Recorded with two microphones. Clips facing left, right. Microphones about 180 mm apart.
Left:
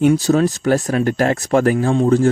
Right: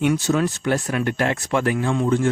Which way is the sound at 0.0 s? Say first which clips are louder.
Left 6 dB; 35° left (ahead or behind).